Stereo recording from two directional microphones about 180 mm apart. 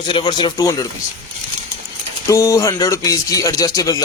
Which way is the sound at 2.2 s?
15° left (ahead or behind).